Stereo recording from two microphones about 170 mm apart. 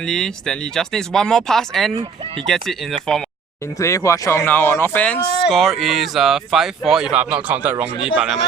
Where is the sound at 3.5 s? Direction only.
15° left (ahead or behind); by 8.3 s 10° right (ahead or behind).